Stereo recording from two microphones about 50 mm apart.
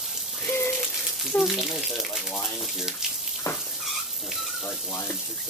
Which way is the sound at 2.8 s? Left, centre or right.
Centre.